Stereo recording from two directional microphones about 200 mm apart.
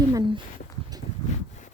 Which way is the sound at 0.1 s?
20° right (ahead or behind).